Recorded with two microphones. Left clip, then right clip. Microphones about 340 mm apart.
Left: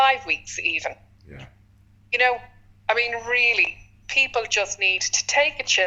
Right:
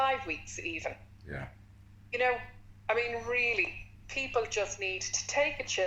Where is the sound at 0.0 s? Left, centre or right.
Left.